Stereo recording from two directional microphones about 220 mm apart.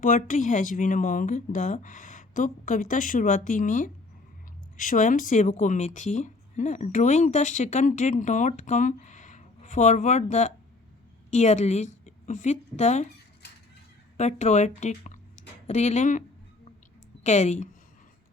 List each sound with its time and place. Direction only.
0.0 s a woman's voice: 35° left (ahead or behind)
14.2 s speech: 30° left (ahead or behind)
17.2 s speech: 30° left (ahead or behind)